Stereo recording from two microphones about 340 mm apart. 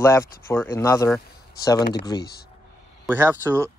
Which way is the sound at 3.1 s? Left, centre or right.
Centre.